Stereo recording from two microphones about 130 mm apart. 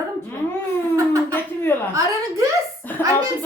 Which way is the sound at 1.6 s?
15° left (ahead or behind).